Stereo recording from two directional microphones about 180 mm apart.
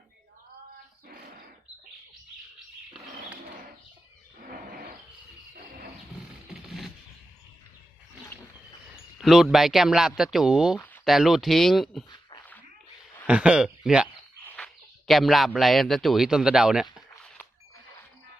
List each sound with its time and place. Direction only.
4.4 s wild animals: 55° right (ahead or behind)
6.5 s a sound: centre (ahead or behind)
9.1 s a man's voice: centre (ahead or behind)
13.2 s speech: 5° right (ahead or behind)
14.4 s speech: 5° left (ahead or behind)